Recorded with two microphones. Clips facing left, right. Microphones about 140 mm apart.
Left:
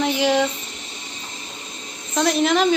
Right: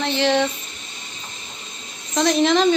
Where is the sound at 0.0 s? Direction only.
10° left (ahead or behind).